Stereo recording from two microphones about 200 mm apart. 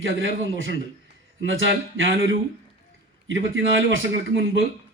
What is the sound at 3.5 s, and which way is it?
A man's voice, 70° right (ahead or behind).